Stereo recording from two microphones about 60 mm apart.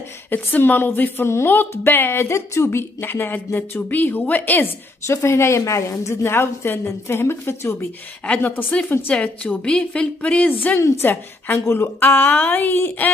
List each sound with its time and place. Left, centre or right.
0.3 s speech: left
5.0 s a woman's voice: left
8.4 s speech: left
9.1 s a woman's voice: left